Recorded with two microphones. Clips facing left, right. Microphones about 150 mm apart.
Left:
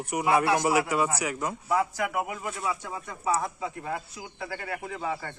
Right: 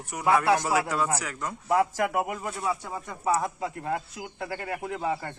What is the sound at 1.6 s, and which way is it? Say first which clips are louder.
Speech: right 4 dB; 40° right (ahead or behind).